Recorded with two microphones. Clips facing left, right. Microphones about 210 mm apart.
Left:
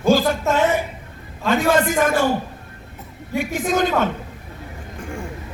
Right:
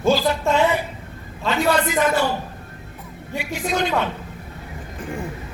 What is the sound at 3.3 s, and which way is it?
Speech, 50° left (ahead or behind).